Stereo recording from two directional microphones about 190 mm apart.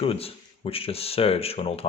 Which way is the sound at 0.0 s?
30° left (ahead or behind).